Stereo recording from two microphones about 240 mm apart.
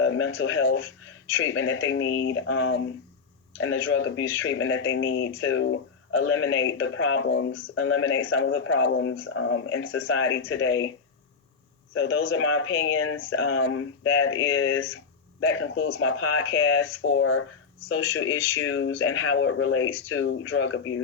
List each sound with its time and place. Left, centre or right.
0.0 s speech: left
11.9 s speech: left